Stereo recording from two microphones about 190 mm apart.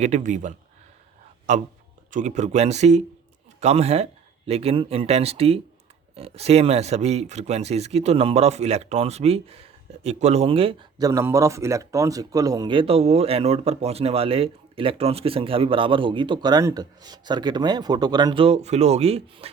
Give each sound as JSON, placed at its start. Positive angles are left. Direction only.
{"t": 0.0, "sound": "speech", "side_deg": -40}